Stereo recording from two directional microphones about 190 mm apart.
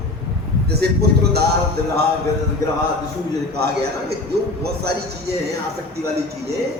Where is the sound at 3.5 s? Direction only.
60° right (ahead or behind).